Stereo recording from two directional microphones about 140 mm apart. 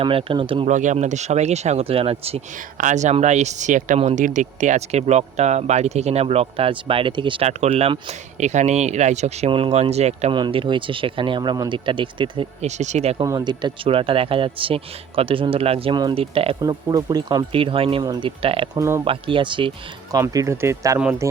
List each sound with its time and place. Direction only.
0.0 s speech: 40° right (ahead or behind)
0.7 s speech: 65° right (ahead or behind); by 2.4 s 45° right (ahead or behind)
2.7 s speech: 65° right (ahead or behind)
10.3 s speech: 35° right (ahead or behind)
12.6 s speech: 55° right (ahead or behind)
13.2 s speech: 30° right (ahead or behind)
16.6 s speech: 30° right (ahead or behind)
17.5 s speech: 40° right (ahead or behind)
18.7 s speech: 20° right (ahead or behind)
19.0 s speech: 35° right (ahead or behind)
20.1 s speech: 25° right (ahead or behind)